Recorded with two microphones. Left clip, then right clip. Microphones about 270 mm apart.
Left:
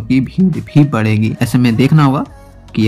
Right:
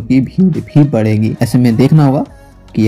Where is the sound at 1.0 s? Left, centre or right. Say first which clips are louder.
Right 2 dB; centre.